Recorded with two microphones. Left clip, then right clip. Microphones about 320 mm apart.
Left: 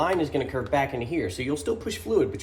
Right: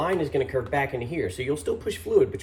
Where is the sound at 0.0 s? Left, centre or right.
Centre.